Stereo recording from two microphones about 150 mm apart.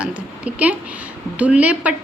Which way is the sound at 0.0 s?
10° right (ahead or behind).